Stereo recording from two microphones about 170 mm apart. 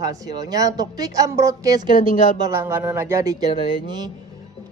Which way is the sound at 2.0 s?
50° left (ahead or behind).